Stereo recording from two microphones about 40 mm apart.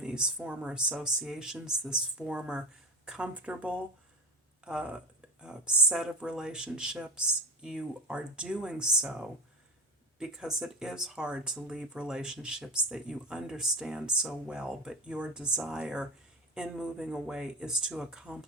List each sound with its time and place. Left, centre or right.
0.0 s speech: right
3.1 s speech: right; by 13.9 s centre
13.9 s speech: right